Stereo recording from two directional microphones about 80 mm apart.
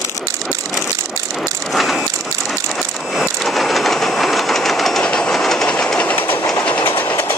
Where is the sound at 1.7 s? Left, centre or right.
Centre.